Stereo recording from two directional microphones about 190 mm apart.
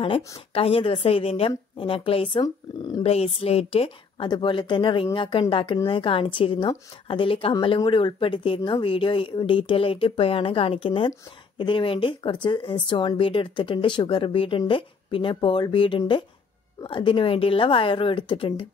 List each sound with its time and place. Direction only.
0.0 s a woman's voice: 30° left (ahead or behind)